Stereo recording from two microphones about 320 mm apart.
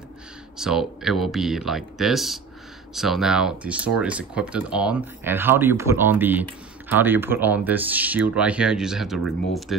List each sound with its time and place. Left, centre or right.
0.6 s speech: centre